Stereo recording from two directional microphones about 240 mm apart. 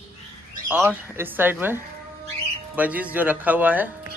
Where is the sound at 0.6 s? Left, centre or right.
Centre.